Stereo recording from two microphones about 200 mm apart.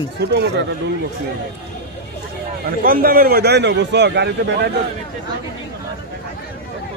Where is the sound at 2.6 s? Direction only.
50° right (ahead or behind).